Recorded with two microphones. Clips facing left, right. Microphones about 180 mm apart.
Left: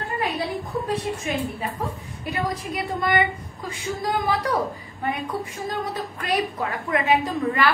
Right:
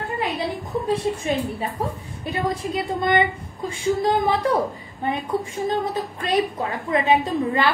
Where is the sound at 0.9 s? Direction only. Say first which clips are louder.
Right 5 dB; 30° right (ahead or behind).